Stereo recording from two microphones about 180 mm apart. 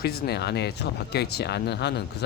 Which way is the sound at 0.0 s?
60° left (ahead or behind).